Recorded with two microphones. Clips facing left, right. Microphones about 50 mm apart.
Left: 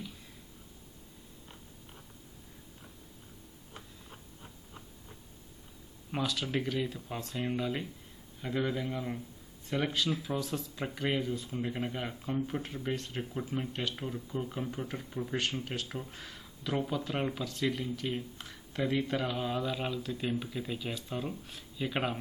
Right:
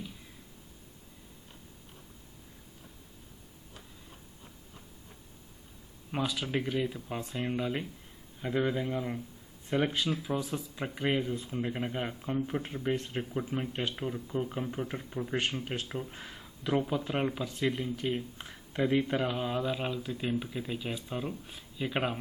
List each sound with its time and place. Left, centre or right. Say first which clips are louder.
6.1 s speech: right 1 dB; centre